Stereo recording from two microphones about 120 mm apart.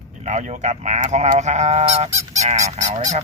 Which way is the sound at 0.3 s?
75° right (ahead or behind).